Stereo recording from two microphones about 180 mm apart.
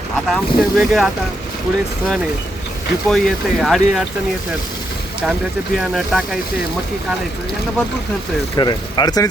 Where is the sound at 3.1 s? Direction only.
Centre (ahead or behind).